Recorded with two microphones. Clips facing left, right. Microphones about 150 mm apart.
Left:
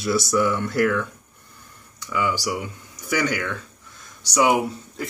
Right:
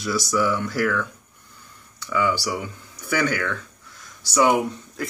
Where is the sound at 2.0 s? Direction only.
15° left (ahead or behind).